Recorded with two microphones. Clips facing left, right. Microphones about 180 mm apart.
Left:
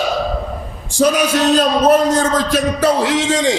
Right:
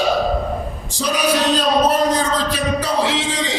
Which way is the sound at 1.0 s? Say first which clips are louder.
Left 5 dB; 50° left (ahead or behind).